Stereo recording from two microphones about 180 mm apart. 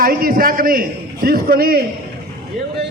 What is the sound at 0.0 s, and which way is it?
A man's voice, 55° right (ahead or behind).